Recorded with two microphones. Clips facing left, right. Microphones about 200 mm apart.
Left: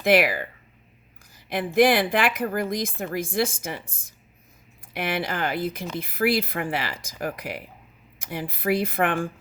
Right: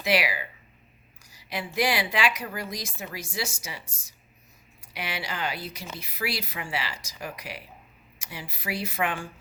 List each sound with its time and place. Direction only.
0.0 s speech: 55° left (ahead or behind)